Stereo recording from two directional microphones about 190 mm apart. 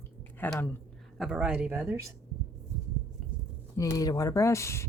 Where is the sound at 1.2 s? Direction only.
5° right (ahead or behind).